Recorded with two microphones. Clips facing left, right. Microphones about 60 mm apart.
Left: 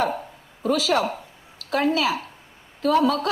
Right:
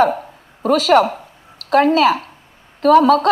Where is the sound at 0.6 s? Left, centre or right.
Right.